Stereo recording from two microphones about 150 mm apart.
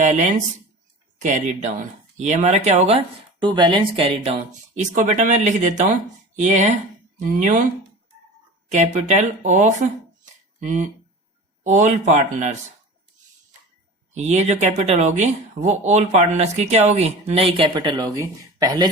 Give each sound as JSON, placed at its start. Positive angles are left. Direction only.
{"t": 0.0, "sound": "speech", "side_deg": -55}
{"t": 3.4, "sound": "speech", "side_deg": -30}
{"t": 8.7, "sound": "speech", "side_deg": -50}
{"t": 14.1, "sound": "speech", "side_deg": -50}